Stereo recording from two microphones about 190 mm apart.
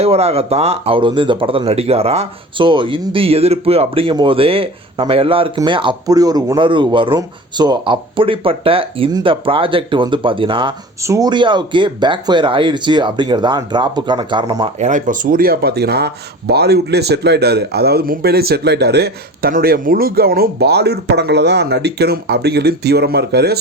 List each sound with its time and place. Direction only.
0.0 s speech: 35° right (ahead or behind)
14.8 s speech: 40° right (ahead or behind); by 23.6 s 60° right (ahead or behind)